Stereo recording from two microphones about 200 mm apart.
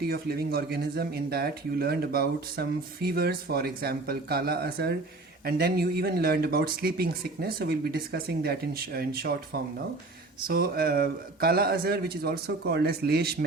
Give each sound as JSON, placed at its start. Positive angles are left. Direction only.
{"t": 0.0, "sound": "speech", "side_deg": -50}